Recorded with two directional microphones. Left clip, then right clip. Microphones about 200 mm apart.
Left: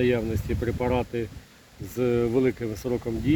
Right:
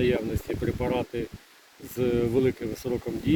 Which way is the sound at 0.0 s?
10° left (ahead or behind).